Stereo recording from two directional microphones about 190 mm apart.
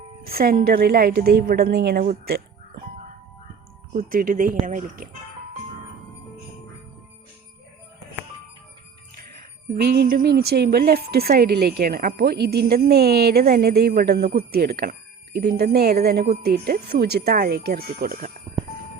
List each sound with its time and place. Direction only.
0.3 s speech: 55° right (ahead or behind)
2.2 s music: 55° right (ahead or behind)
3.9 s speech: 45° right (ahead or behind)
9.8 s a woman's voice: 55° right (ahead or behind)